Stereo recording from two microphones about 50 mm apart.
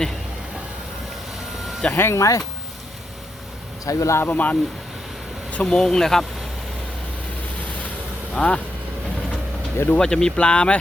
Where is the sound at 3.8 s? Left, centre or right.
Left.